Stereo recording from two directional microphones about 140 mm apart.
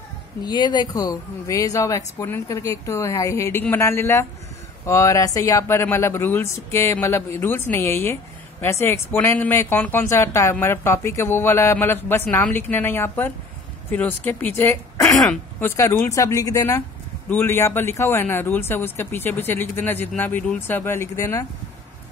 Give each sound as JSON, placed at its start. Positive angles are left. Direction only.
{"t": 0.5, "sound": "speech", "side_deg": 30}